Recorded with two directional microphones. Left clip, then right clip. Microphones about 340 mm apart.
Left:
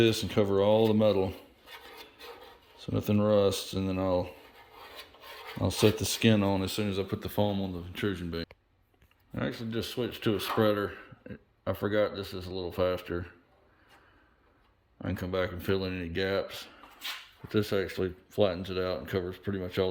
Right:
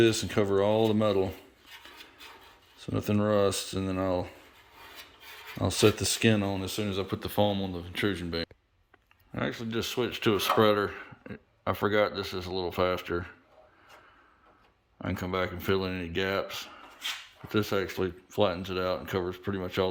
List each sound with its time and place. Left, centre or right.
0.0 s speech: centre
2.8 s speech: centre
5.5 s speech: centre
14.9 s speech: centre